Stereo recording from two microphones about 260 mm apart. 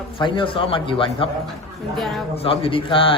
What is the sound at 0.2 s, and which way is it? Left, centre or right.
Speech, centre.